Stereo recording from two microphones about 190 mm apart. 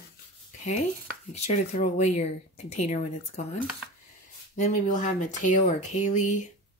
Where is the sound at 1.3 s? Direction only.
40° left (ahead or behind).